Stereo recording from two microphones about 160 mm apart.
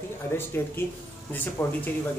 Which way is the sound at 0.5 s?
15° left (ahead or behind).